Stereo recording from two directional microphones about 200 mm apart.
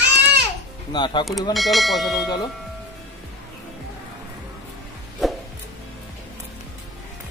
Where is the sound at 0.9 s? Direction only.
20° left (ahead or behind).